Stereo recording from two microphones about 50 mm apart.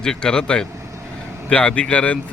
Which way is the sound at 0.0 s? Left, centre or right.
Centre.